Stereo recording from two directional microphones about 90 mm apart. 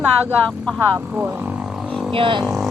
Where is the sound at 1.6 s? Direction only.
5° right (ahead or behind).